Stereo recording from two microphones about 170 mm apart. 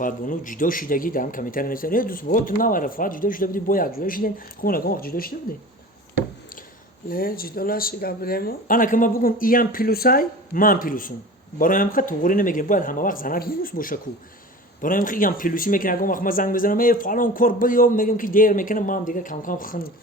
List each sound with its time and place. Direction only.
0.0 s a man's voice: 50° left (ahead or behind)
7.1 s a man's voice: 60° left (ahead or behind)